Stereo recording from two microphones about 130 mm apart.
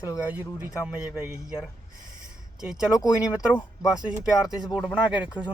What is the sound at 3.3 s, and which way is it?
Speech, 10° right (ahead or behind).